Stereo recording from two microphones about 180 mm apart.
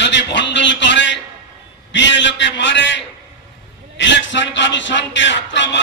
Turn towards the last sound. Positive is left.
turn(degrees=80)